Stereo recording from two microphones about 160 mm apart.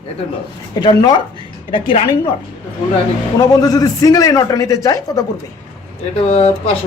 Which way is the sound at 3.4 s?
25° left (ahead or behind).